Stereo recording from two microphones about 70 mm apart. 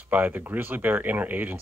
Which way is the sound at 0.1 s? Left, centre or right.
Right.